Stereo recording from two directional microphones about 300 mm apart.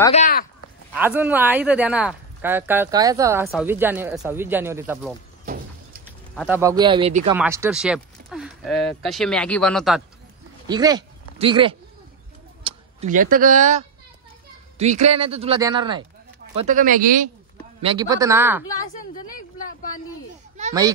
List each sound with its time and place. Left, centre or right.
0.0 s speech: left
0.9 s speech: centre
5.4 s a sound: right
6.3 s speech: centre
7.3 s speech: centre
10.7 s a man's voice: centre
16.5 s a man's voice: right
17.8 s speech: centre
19.1 s a woman's voice: left